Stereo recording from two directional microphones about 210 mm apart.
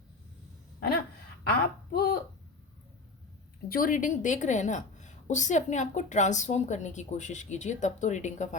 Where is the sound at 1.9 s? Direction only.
50° left (ahead or behind).